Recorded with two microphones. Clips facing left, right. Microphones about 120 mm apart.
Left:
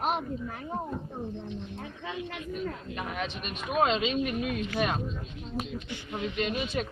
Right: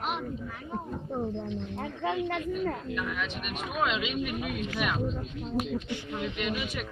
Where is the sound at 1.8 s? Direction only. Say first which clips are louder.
Right 7 dB; 50° right (ahead or behind).